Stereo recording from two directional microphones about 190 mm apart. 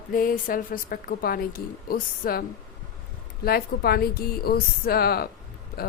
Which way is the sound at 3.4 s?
55° left (ahead or behind).